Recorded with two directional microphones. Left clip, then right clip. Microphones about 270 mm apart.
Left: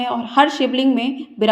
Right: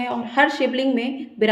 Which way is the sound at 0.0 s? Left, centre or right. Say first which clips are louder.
Left 3 dB; centre.